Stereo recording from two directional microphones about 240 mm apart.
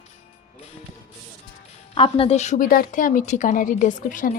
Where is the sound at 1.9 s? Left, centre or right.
Left.